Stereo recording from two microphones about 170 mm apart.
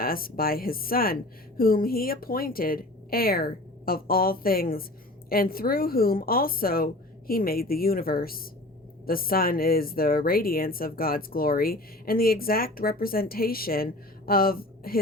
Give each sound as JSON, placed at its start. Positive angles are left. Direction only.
{"t": 0.0, "sound": "speech", "side_deg": 60}